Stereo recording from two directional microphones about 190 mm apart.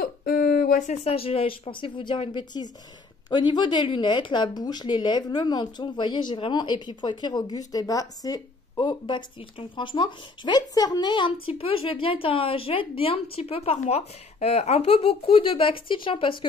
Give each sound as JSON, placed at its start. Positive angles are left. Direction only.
{"t": 0.0, "sound": "speech", "side_deg": 50}